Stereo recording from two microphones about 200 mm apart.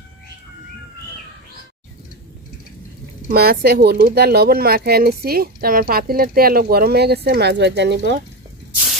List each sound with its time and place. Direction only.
3.3 s speech: 50° right (ahead or behind)